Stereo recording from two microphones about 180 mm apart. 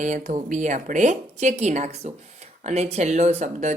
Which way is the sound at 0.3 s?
45° right (ahead or behind).